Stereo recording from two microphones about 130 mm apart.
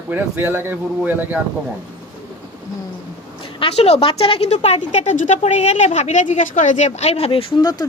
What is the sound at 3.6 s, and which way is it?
A woman's voice, 55° left (ahead or behind).